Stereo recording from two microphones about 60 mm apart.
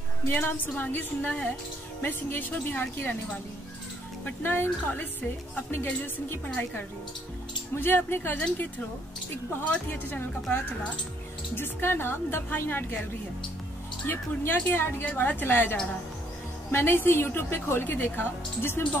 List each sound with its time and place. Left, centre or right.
0.3 s a woman's voice: left
4.2 s a woman's voice: left
7.7 s a woman's voice: left
9.7 s a woman's voice: left
11.5 s a woman's voice: left
14.0 s a woman's voice: left
17.8 s a woman's voice: left